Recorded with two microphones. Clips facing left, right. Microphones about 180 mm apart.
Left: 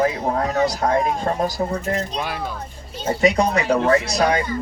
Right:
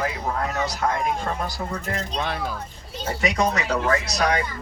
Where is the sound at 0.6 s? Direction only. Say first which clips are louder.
Left 7 dB; 35° left (ahead or behind).